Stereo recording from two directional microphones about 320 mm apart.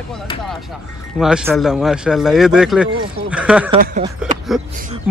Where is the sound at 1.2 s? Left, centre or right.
Centre.